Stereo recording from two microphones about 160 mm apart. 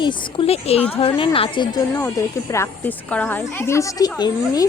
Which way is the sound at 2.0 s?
20° left (ahead or behind).